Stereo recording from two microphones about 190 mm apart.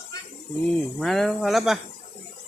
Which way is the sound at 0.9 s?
Centre (ahead or behind).